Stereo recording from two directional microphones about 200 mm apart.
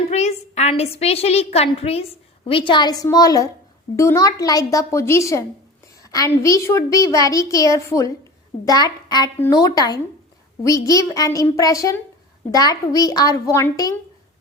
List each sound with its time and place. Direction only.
0.1 s a woman's voice: 35° left (ahead or behind); by 13.9 s 15° left (ahead or behind)